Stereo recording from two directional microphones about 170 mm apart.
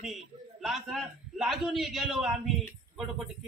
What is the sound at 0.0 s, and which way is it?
Speech, centre (ahead or behind).